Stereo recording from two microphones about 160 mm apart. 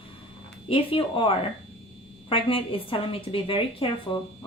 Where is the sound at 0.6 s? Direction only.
35° left (ahead or behind).